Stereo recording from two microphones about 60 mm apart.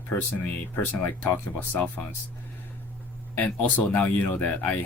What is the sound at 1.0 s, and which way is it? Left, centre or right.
Speech, left.